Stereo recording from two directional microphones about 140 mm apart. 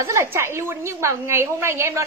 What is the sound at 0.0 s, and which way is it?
A woman's voice, 20° right (ahead or behind).